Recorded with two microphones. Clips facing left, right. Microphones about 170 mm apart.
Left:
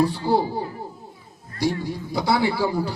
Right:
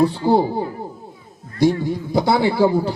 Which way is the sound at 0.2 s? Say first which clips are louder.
Right 5 dB; 45° right (ahead or behind).